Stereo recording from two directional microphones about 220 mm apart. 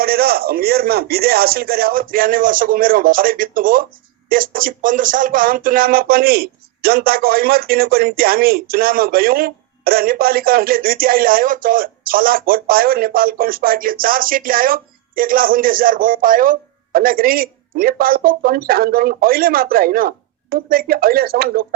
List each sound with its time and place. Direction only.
0.0 s speech: 45° right (ahead or behind)